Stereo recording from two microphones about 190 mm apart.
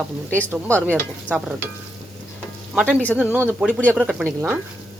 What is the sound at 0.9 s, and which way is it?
Speech, 5° right (ahead or behind).